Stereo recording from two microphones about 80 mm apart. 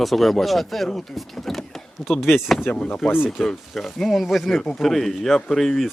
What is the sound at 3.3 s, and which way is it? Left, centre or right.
Speech, centre.